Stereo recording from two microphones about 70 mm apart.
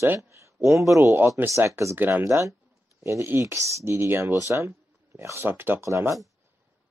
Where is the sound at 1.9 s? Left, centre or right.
Right.